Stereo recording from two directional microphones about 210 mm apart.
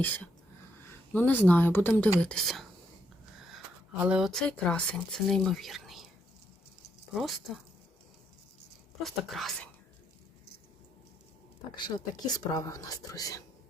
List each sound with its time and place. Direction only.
1.1 s speech: 10° left (ahead or behind)
2.3 s speech: centre (ahead or behind)
7.1 s speech: centre (ahead or behind)
9.0 s speech: centre (ahead or behind)
11.8 s speech: 20° left (ahead or behind)